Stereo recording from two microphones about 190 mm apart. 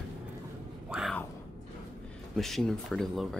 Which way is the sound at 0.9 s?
Centre (ahead or behind).